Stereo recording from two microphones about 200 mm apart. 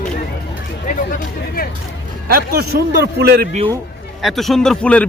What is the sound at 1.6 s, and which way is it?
Speech, 45° left (ahead or behind).